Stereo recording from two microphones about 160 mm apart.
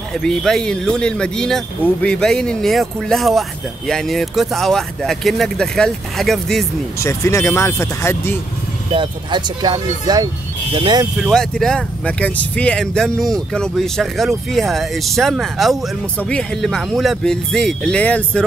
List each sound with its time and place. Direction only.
0.1 s speech: 5° left (ahead or behind)
7.0 s speech: 20° left (ahead or behind)
8.9 s speech: 30° right (ahead or behind)
11.1 s speech: centre (ahead or behind)